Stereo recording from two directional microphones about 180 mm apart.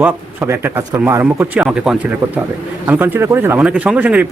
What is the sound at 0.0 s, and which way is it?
A man's voice, 15° right (ahead or behind).